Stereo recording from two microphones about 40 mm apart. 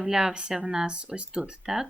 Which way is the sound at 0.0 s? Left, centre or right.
Centre.